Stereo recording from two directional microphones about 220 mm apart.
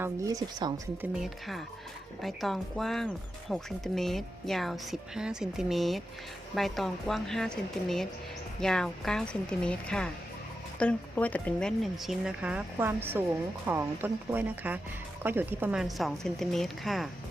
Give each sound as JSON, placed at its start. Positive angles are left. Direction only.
{"t": 0.0, "sound": "speech", "side_deg": -15}
{"t": 1.2, "sound": "speech", "side_deg": 0}